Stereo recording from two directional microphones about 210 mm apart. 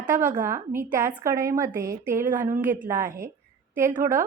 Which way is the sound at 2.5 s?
10° right (ahead or behind).